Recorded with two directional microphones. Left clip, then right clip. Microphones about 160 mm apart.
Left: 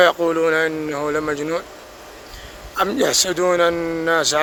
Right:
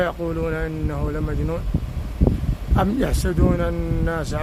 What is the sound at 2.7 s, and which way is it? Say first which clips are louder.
Speech: left 5 dB; 20° left (ahead or behind).